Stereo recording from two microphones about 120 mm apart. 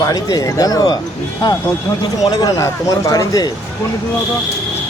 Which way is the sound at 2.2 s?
30° left (ahead or behind).